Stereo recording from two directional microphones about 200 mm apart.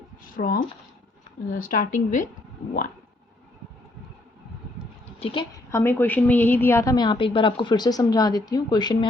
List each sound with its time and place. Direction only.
0.3 s speech: 45° left (ahead or behind)
5.2 s a woman's voice: 25° left (ahead or behind)
5.7 s a woman's voice: 10° left (ahead or behind)